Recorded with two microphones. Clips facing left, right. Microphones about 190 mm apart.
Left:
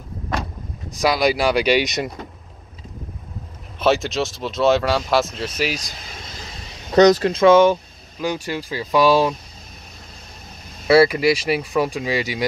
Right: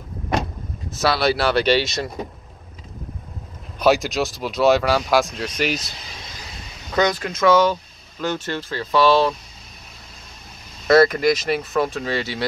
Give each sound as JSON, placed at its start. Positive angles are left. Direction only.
{"t": 0.9, "sound": "speech", "side_deg": 15}
{"t": 3.8, "sound": "speech", "side_deg": 0}
{"t": 6.9, "sound": "speech", "side_deg": 40}
{"t": 8.2, "sound": "speech", "side_deg": 10}
{"t": 10.9, "sound": "speech", "side_deg": 10}